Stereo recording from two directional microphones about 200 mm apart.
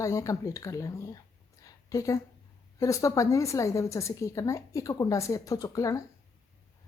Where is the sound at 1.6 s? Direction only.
15° left (ahead or behind).